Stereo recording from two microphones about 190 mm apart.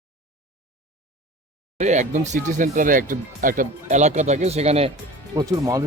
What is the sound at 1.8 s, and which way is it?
Speech, 40° right (ahead or behind).